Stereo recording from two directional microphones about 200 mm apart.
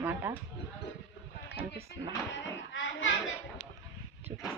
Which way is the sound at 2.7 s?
70° left (ahead or behind).